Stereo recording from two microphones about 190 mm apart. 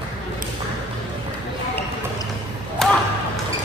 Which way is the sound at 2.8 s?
Centre (ahead or behind).